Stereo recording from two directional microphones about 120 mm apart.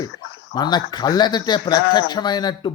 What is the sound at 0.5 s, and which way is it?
Speech, 35° left (ahead or behind).